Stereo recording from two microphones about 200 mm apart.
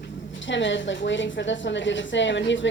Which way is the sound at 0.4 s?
65° left (ahead or behind).